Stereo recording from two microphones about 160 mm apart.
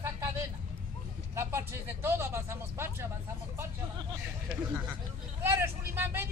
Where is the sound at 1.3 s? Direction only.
15° right (ahead or behind).